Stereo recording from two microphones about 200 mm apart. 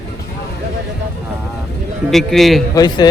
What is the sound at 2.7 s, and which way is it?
Speech, 20° left (ahead or behind).